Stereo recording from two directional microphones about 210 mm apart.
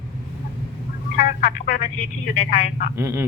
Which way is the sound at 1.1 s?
45° left (ahead or behind).